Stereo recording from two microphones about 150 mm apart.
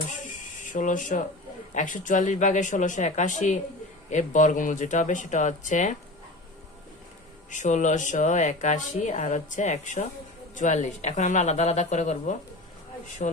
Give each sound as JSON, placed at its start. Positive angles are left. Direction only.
{"t": 0.1, "sound": "music", "side_deg": 60}
{"t": 1.7, "sound": "speech", "side_deg": 60}
{"t": 7.5, "sound": "a woman's voice", "side_deg": 55}